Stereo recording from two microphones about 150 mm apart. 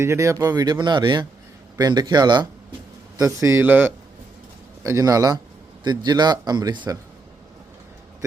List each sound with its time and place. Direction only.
0.0 s speech: 20° right (ahead or behind)